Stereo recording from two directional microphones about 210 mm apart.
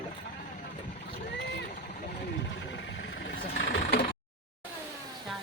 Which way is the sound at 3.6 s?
45° left (ahead or behind).